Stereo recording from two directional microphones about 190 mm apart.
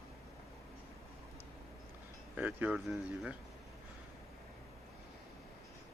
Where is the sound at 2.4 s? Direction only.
10° right (ahead or behind).